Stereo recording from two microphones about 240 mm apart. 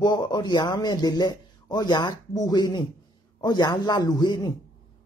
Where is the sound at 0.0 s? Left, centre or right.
Centre.